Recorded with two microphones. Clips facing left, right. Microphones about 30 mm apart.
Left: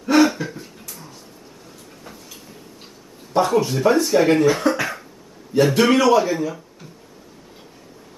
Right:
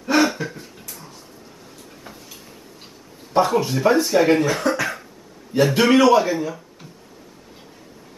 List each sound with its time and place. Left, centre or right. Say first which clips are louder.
0.0 s throat clearing: left 3 dB; centre
2.1 s a sound: even; centre
3.3 s speech: even; centre